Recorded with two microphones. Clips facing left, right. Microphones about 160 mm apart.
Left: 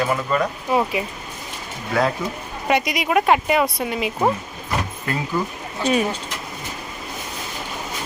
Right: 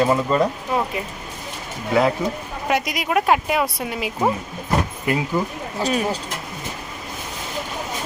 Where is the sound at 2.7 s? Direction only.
Centre (ahead or behind).